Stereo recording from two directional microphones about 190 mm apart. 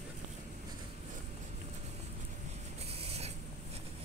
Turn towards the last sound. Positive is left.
turn(degrees=-35)  # may be behind; listen again after turning